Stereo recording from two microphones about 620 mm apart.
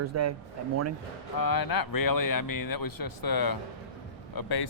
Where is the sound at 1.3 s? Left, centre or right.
Left.